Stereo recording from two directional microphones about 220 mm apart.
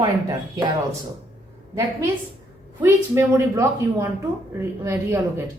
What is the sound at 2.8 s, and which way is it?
A woman's voice, 10° right (ahead or behind).